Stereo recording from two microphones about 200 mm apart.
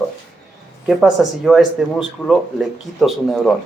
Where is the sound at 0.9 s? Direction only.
Centre (ahead or behind).